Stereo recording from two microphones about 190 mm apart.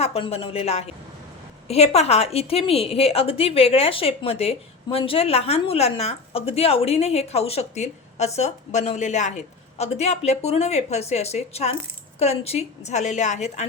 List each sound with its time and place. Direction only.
0.0 s a woman's voice: 30° left (ahead or behind)